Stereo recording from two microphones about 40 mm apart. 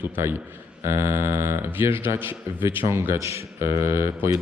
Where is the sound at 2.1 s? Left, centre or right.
Right.